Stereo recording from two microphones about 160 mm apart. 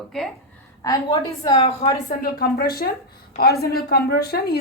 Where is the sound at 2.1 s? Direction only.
70° left (ahead or behind).